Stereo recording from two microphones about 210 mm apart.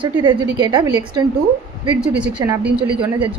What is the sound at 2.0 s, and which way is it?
Speech, 5° right (ahead or behind).